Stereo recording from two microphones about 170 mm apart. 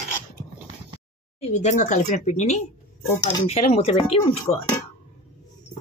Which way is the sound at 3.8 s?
35° left (ahead or behind).